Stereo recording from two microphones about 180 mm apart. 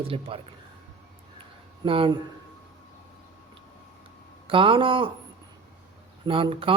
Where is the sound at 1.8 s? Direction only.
30° right (ahead or behind).